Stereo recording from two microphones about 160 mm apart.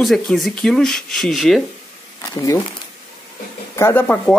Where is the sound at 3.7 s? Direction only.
15° left (ahead or behind).